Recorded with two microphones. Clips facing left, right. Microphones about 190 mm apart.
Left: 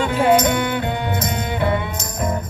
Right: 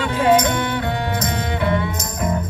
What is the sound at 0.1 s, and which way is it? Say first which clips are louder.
Music: right 1 dB; 20° left (ahead or behind).